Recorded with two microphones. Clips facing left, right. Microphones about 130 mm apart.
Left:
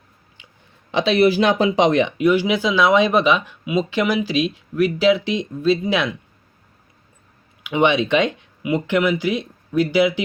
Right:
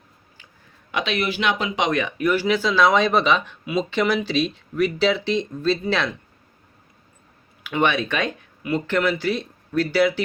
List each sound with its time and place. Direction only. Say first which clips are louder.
0.9 s speech: left 9 dB; 30° left (ahead or behind)
2.1 s speech: left 3 dB; 15° left (ahead or behind)
7.6 s speech: left 4 dB; 20° left (ahead or behind)